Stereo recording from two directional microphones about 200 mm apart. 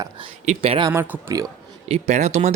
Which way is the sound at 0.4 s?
30° right (ahead or behind).